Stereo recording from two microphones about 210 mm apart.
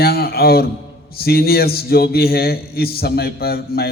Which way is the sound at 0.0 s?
45° left (ahead or behind).